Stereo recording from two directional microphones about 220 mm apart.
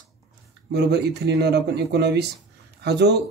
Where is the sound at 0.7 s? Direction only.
50° right (ahead or behind).